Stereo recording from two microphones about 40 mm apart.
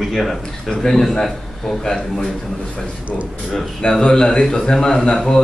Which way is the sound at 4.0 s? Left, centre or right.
Centre.